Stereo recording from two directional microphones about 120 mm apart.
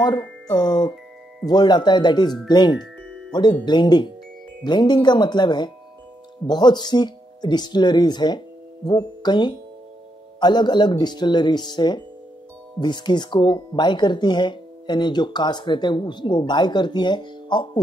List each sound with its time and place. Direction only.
0.0 s speech: 35° left (ahead or behind)